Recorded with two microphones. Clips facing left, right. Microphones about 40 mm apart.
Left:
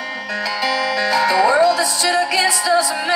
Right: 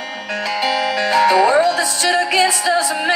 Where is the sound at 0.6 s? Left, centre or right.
Right.